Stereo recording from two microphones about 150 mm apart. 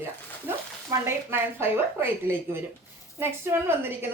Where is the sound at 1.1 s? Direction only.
15° right (ahead or behind).